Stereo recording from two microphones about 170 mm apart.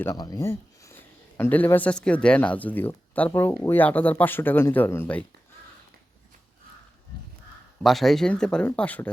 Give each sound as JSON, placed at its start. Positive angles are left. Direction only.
{"t": 0.0, "sound": "speech", "side_deg": 20}
{"t": 7.8, "sound": "speech", "side_deg": 0}